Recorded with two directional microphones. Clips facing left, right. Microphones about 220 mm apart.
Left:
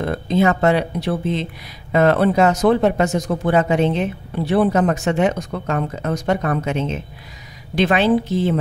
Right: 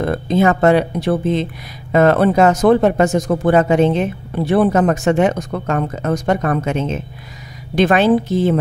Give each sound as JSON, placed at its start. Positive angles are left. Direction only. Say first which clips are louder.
{"t": 0.0, "sound": "speech", "louder": "right 2 dB", "side_deg": -50}